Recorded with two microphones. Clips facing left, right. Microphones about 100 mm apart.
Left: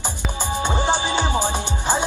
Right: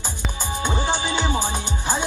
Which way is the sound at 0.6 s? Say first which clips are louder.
Left 3 dB; 20° left (ahead or behind).